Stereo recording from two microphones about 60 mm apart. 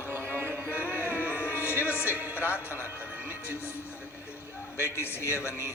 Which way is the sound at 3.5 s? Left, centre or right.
Left.